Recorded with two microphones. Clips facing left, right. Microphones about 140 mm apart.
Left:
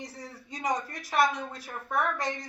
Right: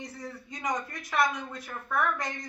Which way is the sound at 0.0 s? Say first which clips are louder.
Right 2 dB; 35° left (ahead or behind).